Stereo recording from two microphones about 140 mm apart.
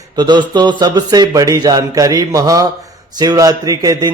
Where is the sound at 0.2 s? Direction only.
30° right (ahead or behind).